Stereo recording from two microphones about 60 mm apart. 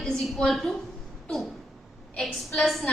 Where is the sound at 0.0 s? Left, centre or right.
Centre.